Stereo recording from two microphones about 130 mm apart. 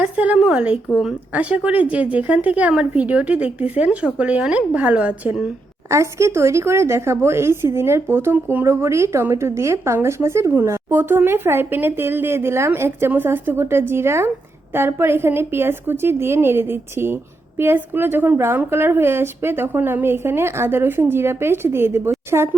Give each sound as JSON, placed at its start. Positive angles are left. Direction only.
{"t": 0.0, "sound": "a woman's voice", "side_deg": -10}
{"t": 5.9, "sound": "a woman's voice", "side_deg": -20}